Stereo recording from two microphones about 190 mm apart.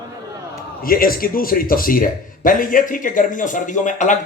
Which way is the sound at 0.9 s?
50° left (ahead or behind).